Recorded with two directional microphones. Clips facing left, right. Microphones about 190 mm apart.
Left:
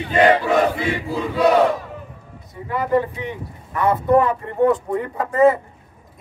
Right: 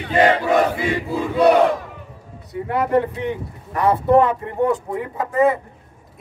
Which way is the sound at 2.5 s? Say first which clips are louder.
Right 1 dB; 70° right (ahead or behind).